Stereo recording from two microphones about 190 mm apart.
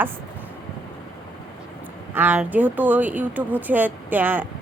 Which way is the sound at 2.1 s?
10° right (ahead or behind).